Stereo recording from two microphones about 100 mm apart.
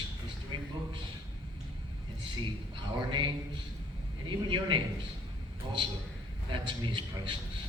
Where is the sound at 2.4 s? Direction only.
50° right (ahead or behind).